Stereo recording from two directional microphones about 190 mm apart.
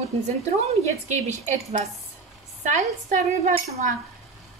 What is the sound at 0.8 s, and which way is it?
Speech, 35° right (ahead or behind).